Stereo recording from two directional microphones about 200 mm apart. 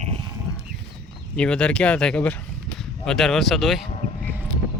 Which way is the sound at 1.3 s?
5° left (ahead or behind).